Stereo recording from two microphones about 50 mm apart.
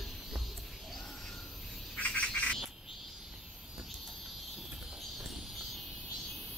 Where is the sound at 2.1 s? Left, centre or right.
Left.